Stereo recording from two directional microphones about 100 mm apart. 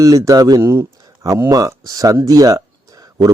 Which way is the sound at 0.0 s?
35° right (ahead or behind).